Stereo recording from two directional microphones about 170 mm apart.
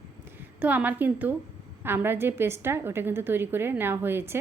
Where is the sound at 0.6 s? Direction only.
10° right (ahead or behind).